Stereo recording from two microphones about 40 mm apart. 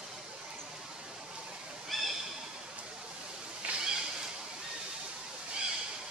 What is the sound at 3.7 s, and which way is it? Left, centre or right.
Cat, right.